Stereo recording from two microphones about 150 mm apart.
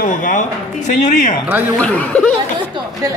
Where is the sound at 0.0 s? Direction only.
60° left (ahead or behind).